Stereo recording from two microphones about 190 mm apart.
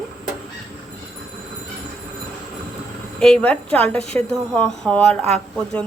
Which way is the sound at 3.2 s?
5° left (ahead or behind).